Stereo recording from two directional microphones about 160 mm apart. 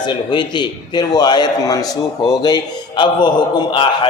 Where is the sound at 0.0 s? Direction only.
30° left (ahead or behind).